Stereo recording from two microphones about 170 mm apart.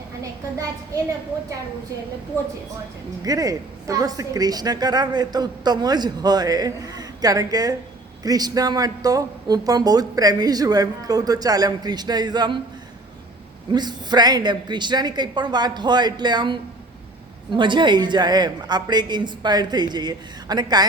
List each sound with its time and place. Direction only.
3.2 s a woman's voice: 20° right (ahead or behind)
13.7 s a woman's voice: 25° right (ahead or behind)
17.6 s a woman's voice: 25° right (ahead or behind)